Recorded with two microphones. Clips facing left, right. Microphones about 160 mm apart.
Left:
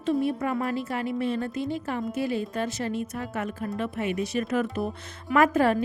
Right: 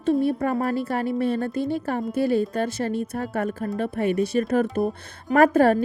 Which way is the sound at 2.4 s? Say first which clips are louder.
Right 5 dB; 40° right (ahead or behind).